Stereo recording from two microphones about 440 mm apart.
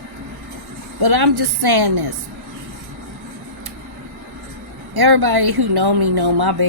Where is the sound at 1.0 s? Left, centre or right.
Right.